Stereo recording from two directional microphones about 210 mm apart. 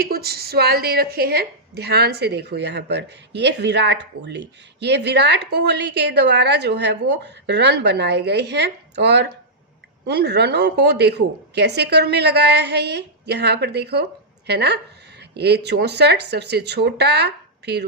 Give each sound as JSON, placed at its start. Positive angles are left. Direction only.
{"t": 0.0, "sound": "a woman's voice", "side_deg": -45}